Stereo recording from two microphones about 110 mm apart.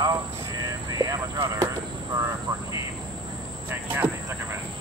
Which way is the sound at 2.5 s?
40° right (ahead or behind).